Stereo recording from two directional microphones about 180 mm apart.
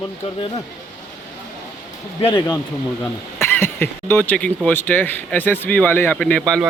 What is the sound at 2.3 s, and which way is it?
Speech, 20° left (ahead or behind).